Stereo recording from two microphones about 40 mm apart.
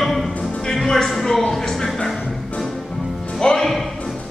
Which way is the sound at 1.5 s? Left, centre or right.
Centre.